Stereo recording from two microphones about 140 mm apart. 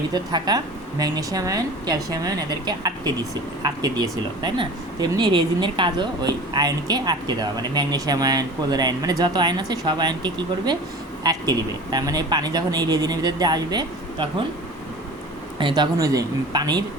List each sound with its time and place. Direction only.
0.1 s speech: 30° right (ahead or behind)
15.5 s speech: 35° right (ahead or behind)